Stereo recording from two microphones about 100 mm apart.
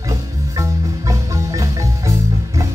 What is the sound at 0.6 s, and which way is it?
Marimba, 35° right (ahead or behind).